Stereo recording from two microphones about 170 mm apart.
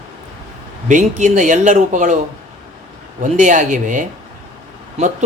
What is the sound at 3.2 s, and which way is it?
Speech, 45° right (ahead or behind).